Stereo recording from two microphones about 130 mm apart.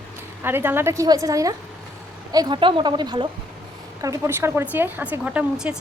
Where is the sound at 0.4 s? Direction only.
15° right (ahead or behind); by 3.2 s 35° right (ahead or behind).